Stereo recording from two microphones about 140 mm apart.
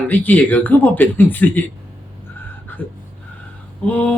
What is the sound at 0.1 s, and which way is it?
Speech, 10° left (ahead or behind).